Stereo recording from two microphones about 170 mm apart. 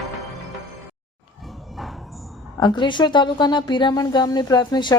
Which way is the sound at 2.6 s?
25° left (ahead or behind).